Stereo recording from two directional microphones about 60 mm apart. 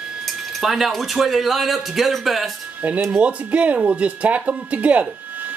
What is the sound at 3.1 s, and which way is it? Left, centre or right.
Speech, right.